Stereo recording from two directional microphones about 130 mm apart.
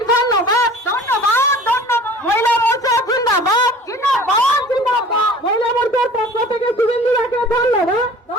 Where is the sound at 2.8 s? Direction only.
25° left (ahead or behind).